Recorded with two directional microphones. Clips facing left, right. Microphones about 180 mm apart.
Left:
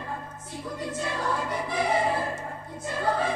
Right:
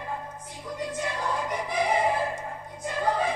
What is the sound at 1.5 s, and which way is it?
Choir, 15° right (ahead or behind).